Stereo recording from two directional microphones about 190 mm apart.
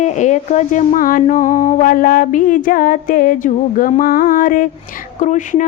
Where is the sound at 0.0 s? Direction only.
40° left (ahead or behind).